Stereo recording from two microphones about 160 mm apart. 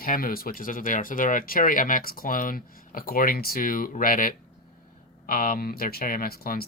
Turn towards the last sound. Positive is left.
turn(degrees=65)  # may be behind; listen again after turning